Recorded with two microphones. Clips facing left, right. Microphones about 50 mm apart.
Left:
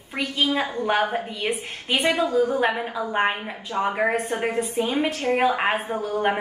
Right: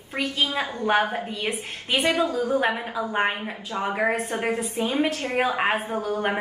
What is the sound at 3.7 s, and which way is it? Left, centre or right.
Speech, left.